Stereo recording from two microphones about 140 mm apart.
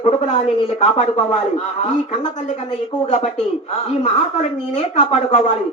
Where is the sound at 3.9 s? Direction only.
50° left (ahead or behind).